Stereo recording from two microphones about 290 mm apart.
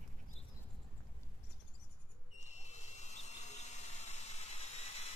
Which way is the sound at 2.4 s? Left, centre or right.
Left.